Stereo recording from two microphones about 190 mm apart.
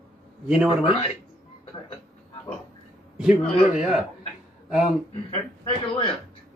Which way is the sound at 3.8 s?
Centre (ahead or behind).